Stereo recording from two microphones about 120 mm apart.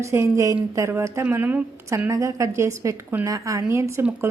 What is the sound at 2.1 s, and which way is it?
A woman's voice, 25° right (ahead or behind).